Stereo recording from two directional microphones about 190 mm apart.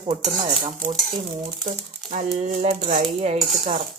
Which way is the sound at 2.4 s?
40° right (ahead or behind).